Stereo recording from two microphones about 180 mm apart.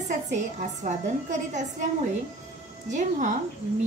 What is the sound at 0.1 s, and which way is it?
Speech, 45° right (ahead or behind).